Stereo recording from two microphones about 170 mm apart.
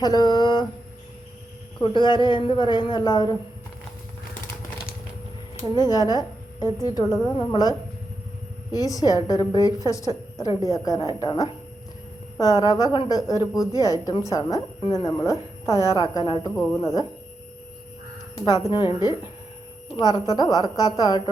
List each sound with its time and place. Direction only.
0.0 s a woman's voice: 25° left (ahead or behind)
1.8 s a woman's voice: 25° left (ahead or behind)
5.7 s a woman's voice: 25° left (ahead or behind)
18.7 s a woman's voice: 25° left (ahead or behind)
20.0 s a woman's voice: 20° left (ahead or behind)